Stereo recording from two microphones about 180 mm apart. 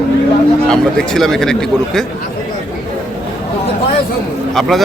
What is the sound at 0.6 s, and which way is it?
Speech, 5° left (ahead or behind).